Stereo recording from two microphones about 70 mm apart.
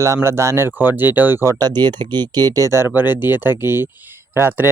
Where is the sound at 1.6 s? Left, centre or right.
Right.